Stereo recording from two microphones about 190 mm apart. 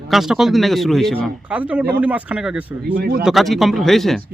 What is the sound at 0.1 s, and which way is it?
A man's voice, centre (ahead or behind).